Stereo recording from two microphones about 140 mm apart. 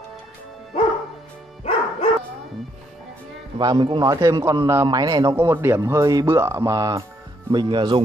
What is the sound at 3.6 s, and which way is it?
Speech, 30° right (ahead or behind).